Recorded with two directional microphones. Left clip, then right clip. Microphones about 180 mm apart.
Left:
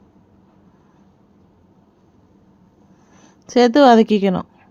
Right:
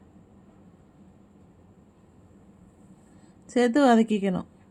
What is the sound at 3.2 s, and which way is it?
A woman's voice, 25° left (ahead or behind).